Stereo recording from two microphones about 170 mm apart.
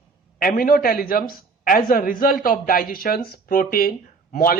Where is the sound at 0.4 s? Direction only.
60° left (ahead or behind).